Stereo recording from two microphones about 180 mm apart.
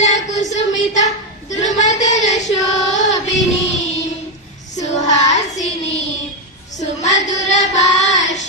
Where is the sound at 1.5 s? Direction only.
40° left (ahead or behind).